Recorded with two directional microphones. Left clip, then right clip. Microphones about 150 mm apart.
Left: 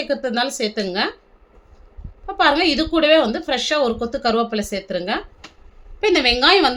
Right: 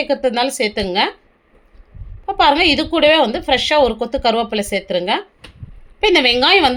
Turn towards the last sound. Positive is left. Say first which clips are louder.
# right 2 dB
turn(degrees=-15)  # may be behind; listen again after turning